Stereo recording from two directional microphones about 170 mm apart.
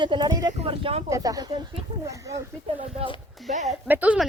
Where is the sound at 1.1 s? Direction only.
20° right (ahead or behind).